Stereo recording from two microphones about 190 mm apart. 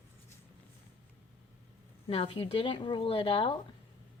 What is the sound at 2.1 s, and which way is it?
Speech, 30° left (ahead or behind).